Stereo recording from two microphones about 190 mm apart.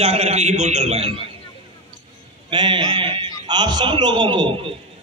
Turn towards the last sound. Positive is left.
turn(degrees=-25)  # may be behind; listen again after turning